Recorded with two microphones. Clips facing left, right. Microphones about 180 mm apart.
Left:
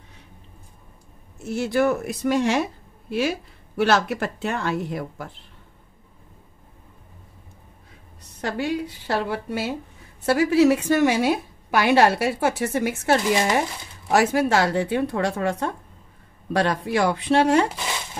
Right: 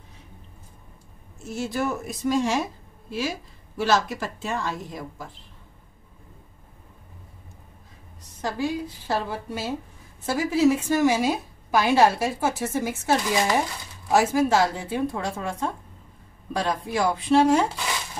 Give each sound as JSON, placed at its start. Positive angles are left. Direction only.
{"t": 1.4, "sound": "a woman's voice", "side_deg": 65}
{"t": 8.4, "sound": "a woman's voice", "side_deg": 70}